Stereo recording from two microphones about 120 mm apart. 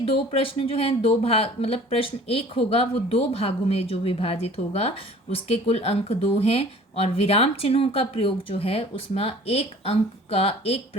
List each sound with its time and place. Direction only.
0.0 s speech: 50° left (ahead or behind)